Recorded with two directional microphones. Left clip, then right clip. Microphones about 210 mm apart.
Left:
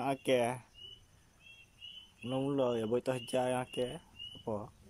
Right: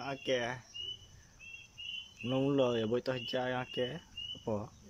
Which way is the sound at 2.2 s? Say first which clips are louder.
Right 2 dB; centre (ahead or behind).